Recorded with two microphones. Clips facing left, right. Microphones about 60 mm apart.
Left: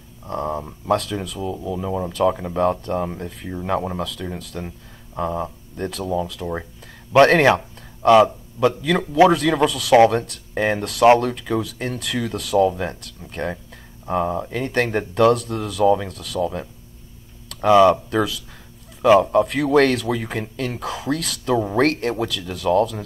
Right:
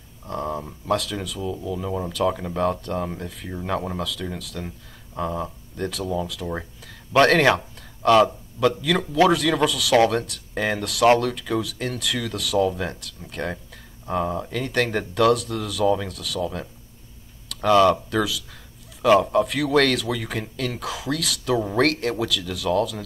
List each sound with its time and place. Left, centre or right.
0.3 s speech: left
3.6 s speech: centre
4.0 s speech: left
4.6 s speech: centre
5.9 s speech: left
6.5 s speech: centre
14.0 s speech: centre
14.5 s speech: left
19.3 s speech: left